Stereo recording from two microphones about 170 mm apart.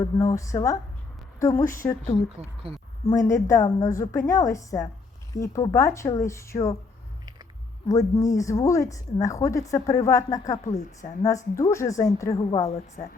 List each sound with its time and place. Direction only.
0.0 s a woman's voice: 20° left (ahead or behind)
2.4 s speech: 40° right (ahead or behind)
3.1 s speech: 20° left (ahead or behind)
7.9 s speech: 20° left (ahead or behind)
13.0 s speech: 50° left (ahead or behind)